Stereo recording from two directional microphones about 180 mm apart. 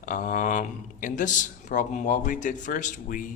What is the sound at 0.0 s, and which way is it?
A man's voice, 45° left (ahead or behind).